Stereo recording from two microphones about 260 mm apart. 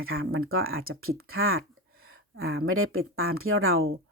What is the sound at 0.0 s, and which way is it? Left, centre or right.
Speech, right.